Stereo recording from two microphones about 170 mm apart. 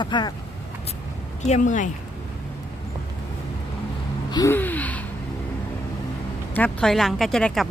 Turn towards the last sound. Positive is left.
turn(degrees=0)  # may be behind; listen again after turning